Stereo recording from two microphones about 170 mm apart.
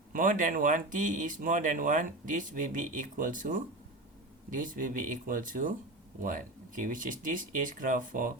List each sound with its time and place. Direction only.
0.1 s speech: 50° right (ahead or behind)